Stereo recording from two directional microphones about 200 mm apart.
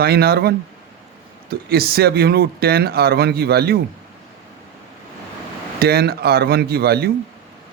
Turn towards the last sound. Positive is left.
turn(degrees=-50)  # may be behind; listen again after turning